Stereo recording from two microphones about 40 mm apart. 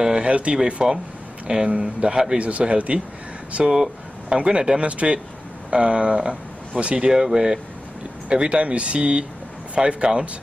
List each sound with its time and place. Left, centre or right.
0.0 s a sound: right
0.7 s a man's voice: right
2.3 s speech: right
4.3 s a man's voice: right
7.1 s a man's voice: centre